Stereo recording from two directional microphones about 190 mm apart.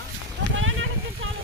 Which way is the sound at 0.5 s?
90° right.